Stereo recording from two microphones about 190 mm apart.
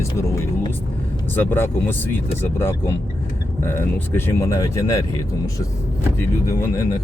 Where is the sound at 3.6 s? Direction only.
10° left (ahead or behind).